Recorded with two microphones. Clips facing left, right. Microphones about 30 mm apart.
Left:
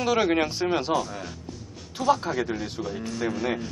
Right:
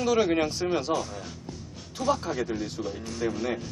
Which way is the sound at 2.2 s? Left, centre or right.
Centre.